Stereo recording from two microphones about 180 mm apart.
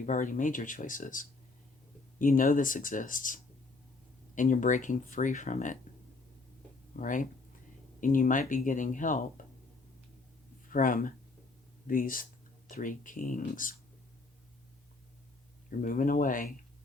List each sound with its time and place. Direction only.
0.0 s speech: 45° left (ahead or behind)
6.9 s speech: 45° left (ahead or behind)
10.7 s speech: 50° left (ahead or behind)
15.8 s speech: 50° left (ahead or behind)